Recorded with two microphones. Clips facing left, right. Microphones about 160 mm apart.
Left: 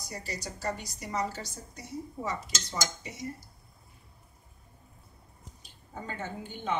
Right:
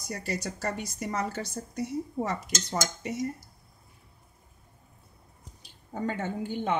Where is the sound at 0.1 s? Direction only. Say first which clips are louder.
Right 6 dB; 60° right (ahead or behind).